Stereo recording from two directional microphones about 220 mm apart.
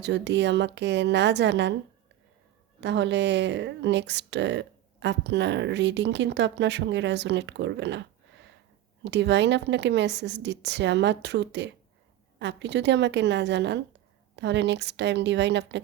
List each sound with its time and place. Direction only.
0.0 s speech: 50° right (ahead or behind)
2.8 s speech: 50° right (ahead or behind)